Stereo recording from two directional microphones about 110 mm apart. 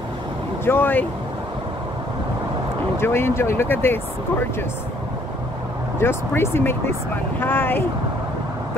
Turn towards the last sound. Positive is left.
turn(degrees=20)  # may be behind; listen again after turning